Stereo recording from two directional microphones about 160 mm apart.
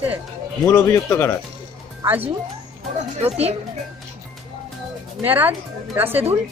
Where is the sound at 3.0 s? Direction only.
40° right (ahead or behind).